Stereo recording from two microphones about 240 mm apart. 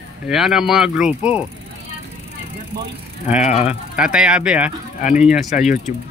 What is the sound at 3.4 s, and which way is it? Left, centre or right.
Speech, left.